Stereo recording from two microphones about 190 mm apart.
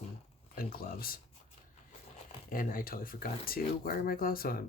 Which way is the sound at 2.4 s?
50° left (ahead or behind).